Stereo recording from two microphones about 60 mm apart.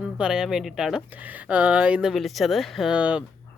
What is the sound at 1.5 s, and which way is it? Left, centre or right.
Speech, right.